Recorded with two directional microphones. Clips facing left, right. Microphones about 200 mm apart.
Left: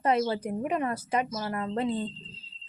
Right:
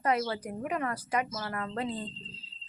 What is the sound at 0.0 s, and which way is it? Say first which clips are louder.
Speech: left 4 dB; 25° left (ahead or behind).